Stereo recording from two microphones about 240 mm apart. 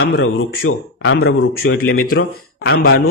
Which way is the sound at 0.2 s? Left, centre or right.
Left.